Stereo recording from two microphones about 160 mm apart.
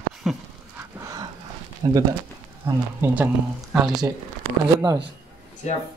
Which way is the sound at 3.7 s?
5° right (ahead or behind).